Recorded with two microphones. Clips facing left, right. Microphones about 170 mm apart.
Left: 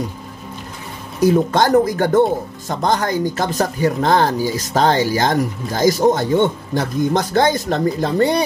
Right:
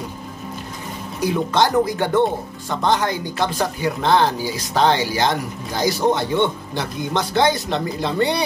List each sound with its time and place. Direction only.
1.2 s speech: 45° left (ahead or behind)